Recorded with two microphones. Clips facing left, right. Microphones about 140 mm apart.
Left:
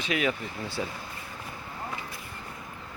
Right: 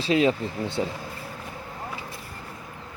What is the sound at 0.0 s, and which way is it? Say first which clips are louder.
Speech: right 7 dB; 30° right (ahead or behind).